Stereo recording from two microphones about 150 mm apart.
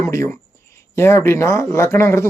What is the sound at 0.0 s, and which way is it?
Speech, 20° left (ahead or behind).